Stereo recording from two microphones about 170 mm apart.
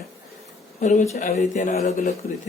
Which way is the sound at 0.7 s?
45° left (ahead or behind).